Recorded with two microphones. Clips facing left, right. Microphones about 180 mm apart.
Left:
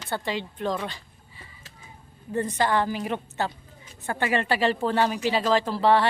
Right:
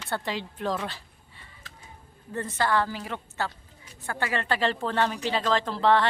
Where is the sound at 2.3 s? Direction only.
15° left (ahead or behind).